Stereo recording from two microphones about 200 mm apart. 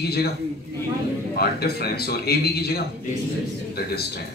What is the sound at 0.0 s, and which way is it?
Speech, 50° left (ahead or behind).